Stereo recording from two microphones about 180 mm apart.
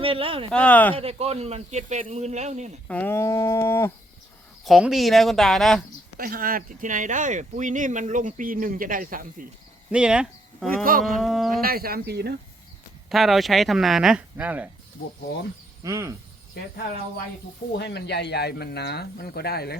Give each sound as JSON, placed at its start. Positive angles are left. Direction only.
{"t": 0.0, "sound": "a man's voice", "side_deg": -30}
{"t": 0.5, "sound": "speech", "side_deg": 10}
{"t": 0.9, "sound": "a man's voice", "side_deg": -35}
{"t": 2.8, "sound": "speech", "side_deg": 10}
{"t": 4.6, "sound": "speech", "side_deg": 0}
{"t": 6.1, "sound": "speech", "side_deg": -50}
{"t": 9.9, "sound": "speech", "side_deg": -5}
{"t": 11.6, "sound": "speech", "side_deg": -55}
{"t": 13.1, "sound": "speech", "side_deg": 0}
{"t": 15.8, "sound": "speech", "side_deg": -15}
{"t": 17.7, "sound": "speech", "side_deg": 70}